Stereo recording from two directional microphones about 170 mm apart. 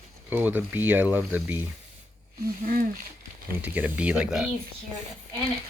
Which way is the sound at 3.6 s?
10° right (ahead or behind).